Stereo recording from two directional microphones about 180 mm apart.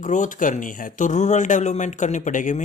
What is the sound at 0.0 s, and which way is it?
Speech, 45° left (ahead or behind).